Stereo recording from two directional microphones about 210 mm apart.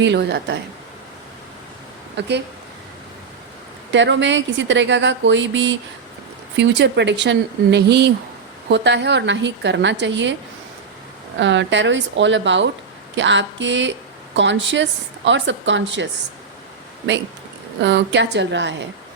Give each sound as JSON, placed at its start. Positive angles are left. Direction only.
{"t": 0.0, "sound": "a woman's voice", "side_deg": -55}
{"t": 2.1, "sound": "speech", "side_deg": -55}
{"t": 3.9, "sound": "a woman's voice", "side_deg": -60}
{"t": 11.3, "sound": "a woman's voice", "side_deg": -60}
{"t": 17.7, "sound": "a woman's voice", "side_deg": -60}